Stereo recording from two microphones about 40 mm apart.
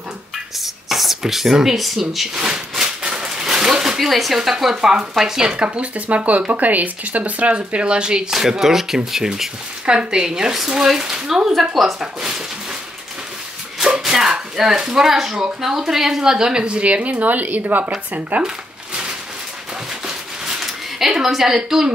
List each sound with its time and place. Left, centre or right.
0.6 s a sound: centre
4.1 s speech: centre; by 8.3 s right
8.3 s speech: centre
13.8 s slap: centre
14.6 s speech: centre; by 17.9 s right
20.6 s speech: centre